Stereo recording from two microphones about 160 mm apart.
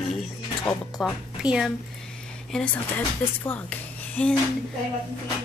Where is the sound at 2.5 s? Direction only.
5° left (ahead or behind).